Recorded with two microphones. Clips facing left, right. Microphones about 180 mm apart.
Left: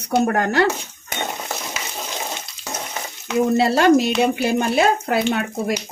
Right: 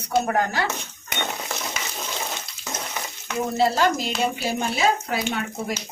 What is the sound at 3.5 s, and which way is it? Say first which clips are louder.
Speech: left 5 dB; 70° left (ahead or behind).